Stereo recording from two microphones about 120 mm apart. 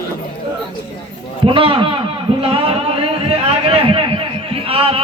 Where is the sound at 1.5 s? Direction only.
45° right (ahead or behind).